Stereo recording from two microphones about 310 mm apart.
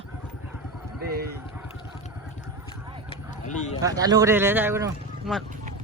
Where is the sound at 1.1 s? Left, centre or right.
Right.